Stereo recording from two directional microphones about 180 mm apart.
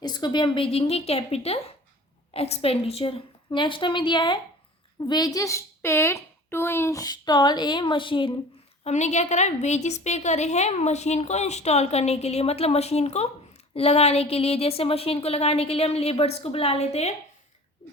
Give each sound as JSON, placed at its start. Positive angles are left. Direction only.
{"t": 0.0, "sound": "a woman's voice", "side_deg": 25}
{"t": 8.8, "sound": "a woman's voice", "side_deg": 40}